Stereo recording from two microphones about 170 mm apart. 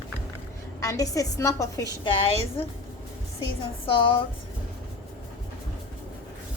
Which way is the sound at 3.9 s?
30° left (ahead or behind).